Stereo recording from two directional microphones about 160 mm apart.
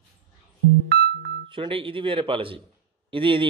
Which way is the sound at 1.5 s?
35° right (ahead or behind).